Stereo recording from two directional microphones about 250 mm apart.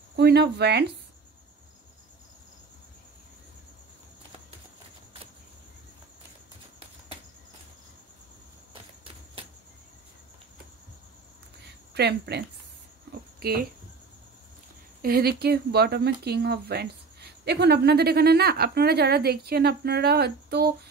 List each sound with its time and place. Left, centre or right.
0.1 s speech: right
9.0 s a sound: right
11.9 s speech: right
15.0 s speech: right